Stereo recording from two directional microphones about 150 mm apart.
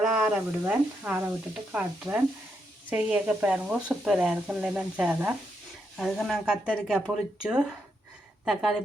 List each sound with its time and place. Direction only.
0.0 s speech: 10° right (ahead or behind)